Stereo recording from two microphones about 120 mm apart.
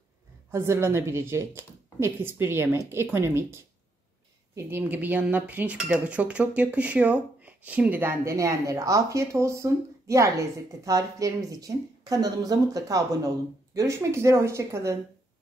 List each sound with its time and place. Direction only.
0.5 s speech: 20° right (ahead or behind)